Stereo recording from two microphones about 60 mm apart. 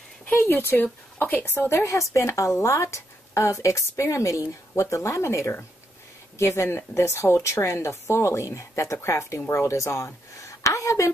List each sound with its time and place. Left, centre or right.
0.4 s a woman's voice: left